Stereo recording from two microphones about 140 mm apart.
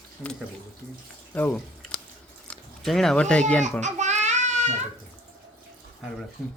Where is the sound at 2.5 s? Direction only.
Centre (ahead or behind).